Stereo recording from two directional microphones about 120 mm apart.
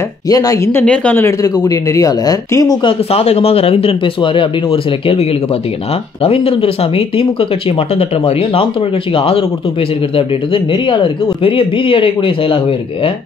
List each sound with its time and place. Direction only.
0.3 s speech: 30° left (ahead or behind)
0.7 s a woman's voice: 15° left (ahead or behind)
1.2 s speech: 30° left (ahead or behind)
2.8 s speech: 50° left (ahead or behind)
6.2 s speech: 55° left (ahead or behind)